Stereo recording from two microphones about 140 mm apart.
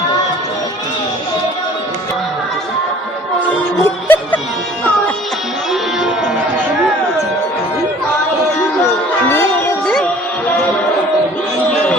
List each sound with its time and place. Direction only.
3.8 s music: 15° left (ahead or behind)
9.8 s music: 5° left (ahead or behind)